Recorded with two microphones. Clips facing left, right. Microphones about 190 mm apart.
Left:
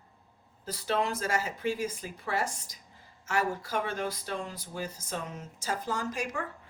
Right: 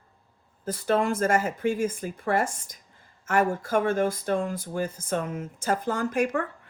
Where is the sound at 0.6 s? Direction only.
50° right (ahead or behind).